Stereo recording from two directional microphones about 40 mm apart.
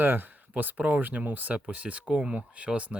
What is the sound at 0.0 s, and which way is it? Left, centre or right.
Speech, right.